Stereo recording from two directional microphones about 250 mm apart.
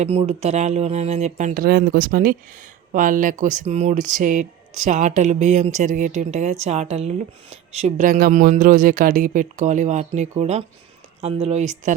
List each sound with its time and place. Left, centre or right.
0.0 s speech: right